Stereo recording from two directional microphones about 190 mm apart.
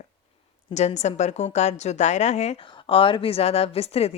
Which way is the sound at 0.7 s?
35° left (ahead or behind).